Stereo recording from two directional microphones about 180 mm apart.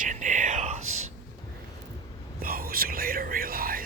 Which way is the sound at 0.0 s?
45° right (ahead or behind).